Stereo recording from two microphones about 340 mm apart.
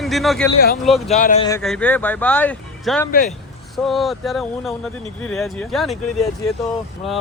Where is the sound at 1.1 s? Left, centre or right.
Left.